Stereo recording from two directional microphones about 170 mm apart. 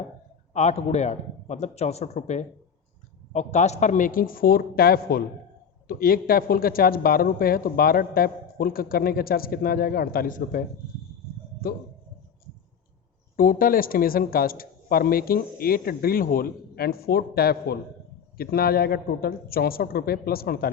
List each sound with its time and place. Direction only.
0.5 s speech: 40° left (ahead or behind)
11.6 s speech: 60° left (ahead or behind)
13.3 s speech: 55° left (ahead or behind)